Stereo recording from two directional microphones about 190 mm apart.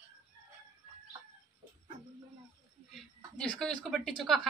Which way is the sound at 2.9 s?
5° left (ahead or behind).